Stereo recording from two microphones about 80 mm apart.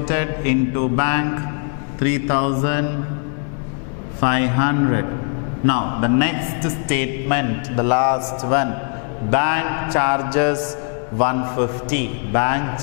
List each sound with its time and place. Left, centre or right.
0.1 s a man's voice: centre
4.2 s a man's voice: centre